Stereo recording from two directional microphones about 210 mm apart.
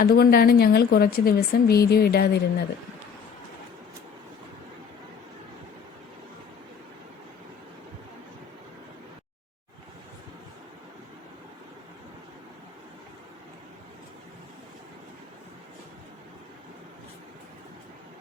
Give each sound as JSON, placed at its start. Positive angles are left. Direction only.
{"t": 0.0, "sound": "speech", "side_deg": 45}